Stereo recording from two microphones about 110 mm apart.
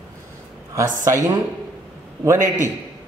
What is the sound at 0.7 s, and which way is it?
Speech, 30° right (ahead or behind).